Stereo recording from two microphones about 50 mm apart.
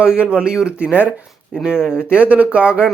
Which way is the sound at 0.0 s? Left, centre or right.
Right.